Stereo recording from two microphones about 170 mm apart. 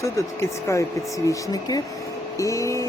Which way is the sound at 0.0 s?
15° left (ahead or behind).